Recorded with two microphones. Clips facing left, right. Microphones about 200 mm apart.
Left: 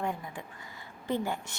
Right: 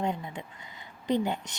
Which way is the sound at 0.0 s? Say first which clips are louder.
Right 3 dB; 25° right (ahead or behind).